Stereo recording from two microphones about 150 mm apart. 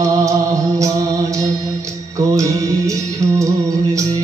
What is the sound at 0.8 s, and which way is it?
Music, 20° right (ahead or behind).